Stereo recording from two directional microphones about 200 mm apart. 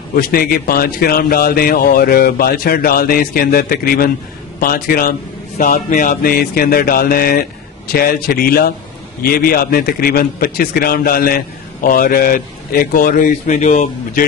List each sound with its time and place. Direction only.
0.1 s a man's voice: 45° left (ahead or behind)